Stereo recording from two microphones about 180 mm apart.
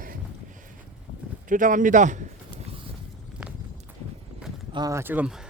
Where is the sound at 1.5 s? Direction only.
45° right (ahead or behind).